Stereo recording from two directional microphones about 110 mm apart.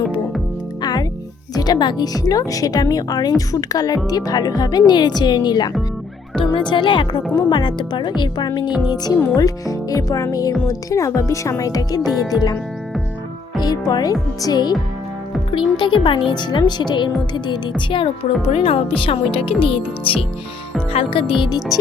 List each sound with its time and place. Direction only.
0.8 s music: 40° left (ahead or behind)
1.5 s a woman's voice: 35° left (ahead or behind)
13.6 s speech: 40° left (ahead or behind)
15.5 s speech: 50° left (ahead or behind)